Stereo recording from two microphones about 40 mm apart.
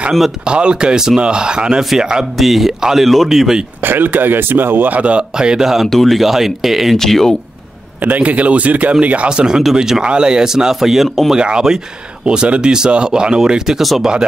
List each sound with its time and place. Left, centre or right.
0.5 s speech: right
2.3 s speech: centre
3.8 s speech: right
4.9 s a man's voice: right
5.3 s speech: centre
5.9 s speech: centre
7.0 s speech: centre
8.0 s a man's voice: right
9.3 s speech: centre
11.3 s speech: right